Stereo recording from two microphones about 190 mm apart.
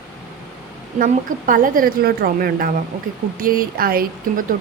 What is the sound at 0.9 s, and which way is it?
A woman's voice, 45° right (ahead or behind).